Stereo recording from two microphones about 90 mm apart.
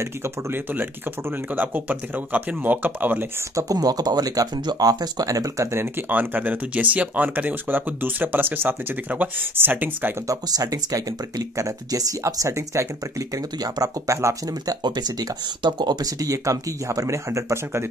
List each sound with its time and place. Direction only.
0.0 s speech: 30° right (ahead or behind)
3.5 s speech: 40° right (ahead or behind)
5.3 s speech: 35° right (ahead or behind); by 10.1 s 20° right (ahead or behind)
10.2 s speech: 45° right (ahead or behind)
13.3 s speech: 45° right (ahead or behind)